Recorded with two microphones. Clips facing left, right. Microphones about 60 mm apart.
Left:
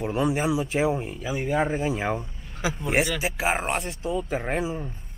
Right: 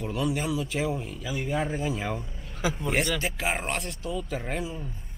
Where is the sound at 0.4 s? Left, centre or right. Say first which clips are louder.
Left 5 dB; left.